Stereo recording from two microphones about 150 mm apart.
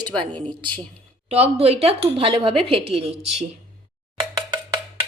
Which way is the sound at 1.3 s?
45° right (ahead or behind).